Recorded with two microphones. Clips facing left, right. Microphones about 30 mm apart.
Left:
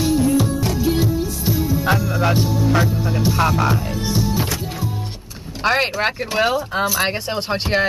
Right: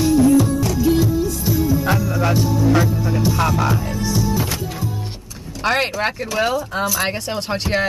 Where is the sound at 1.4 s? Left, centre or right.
Left.